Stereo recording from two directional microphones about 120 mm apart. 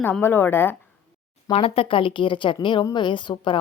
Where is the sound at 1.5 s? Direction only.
50° left (ahead or behind).